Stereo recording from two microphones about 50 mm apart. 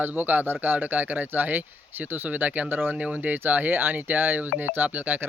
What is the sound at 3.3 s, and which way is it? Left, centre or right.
Speech, right.